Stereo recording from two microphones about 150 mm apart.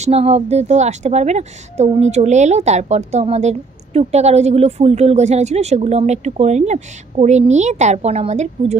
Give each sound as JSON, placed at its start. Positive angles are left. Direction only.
{"t": 0.0, "sound": "a woman's voice", "side_deg": -45}